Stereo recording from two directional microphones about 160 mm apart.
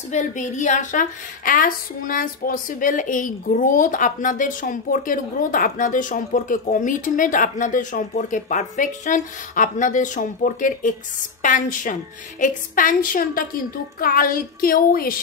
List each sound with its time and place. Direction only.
0.1 s a woman's voice: 50° left (ahead or behind); by 15.1 s 65° left (ahead or behind)